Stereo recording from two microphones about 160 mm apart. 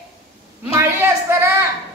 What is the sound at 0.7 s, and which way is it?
Speech, 15° right (ahead or behind).